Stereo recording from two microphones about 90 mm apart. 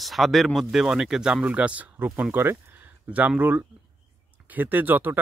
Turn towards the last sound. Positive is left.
turn(degrees=-20)  # may be behind; listen again after turning